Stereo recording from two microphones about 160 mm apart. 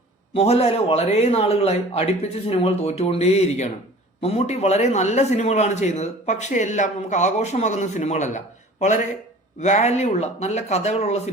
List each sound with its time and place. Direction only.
0.3 s a man's voice: 40° left (ahead or behind)
9.6 s a man's voice: 45° left (ahead or behind)